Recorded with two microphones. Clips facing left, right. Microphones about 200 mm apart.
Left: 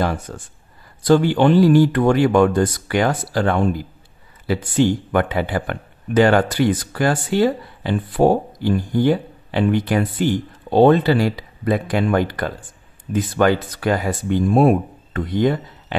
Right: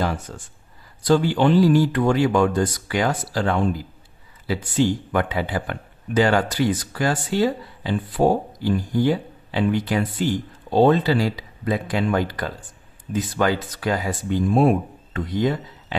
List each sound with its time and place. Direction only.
0.3 s speech: 55° left (ahead or behind)